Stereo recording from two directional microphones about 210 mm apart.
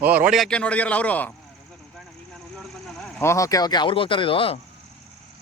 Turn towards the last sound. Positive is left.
turn(degrees=25)  # may be behind; listen again after turning